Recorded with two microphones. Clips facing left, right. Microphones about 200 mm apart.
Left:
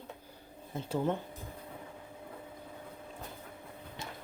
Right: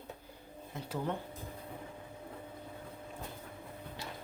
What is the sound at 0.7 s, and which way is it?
Speech, 30° left (ahead or behind).